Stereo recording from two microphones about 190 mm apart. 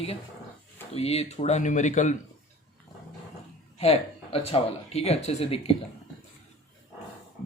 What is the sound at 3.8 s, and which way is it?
Speech, 30° left (ahead or behind).